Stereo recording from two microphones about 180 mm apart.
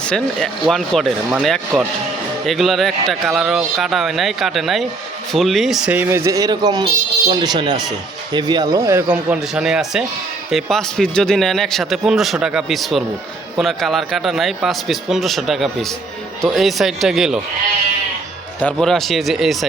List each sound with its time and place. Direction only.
0.0 s speech: 5° left (ahead or behind)
18.6 s speech: centre (ahead or behind)